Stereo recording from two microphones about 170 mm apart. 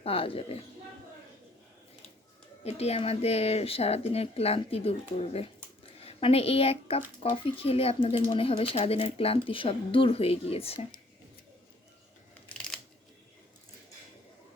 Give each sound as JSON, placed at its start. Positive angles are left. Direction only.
{"t": 0.0, "sound": "speech", "side_deg": 35}
{"t": 2.6, "sound": "speech", "side_deg": 40}